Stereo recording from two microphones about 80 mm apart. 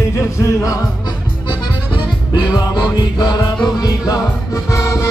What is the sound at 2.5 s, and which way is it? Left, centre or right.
Music, left.